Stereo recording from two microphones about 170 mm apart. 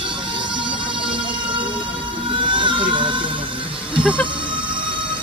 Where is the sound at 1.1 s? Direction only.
30° right (ahead or behind).